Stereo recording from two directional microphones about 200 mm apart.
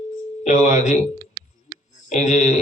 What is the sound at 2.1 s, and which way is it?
Speech, 35° left (ahead or behind).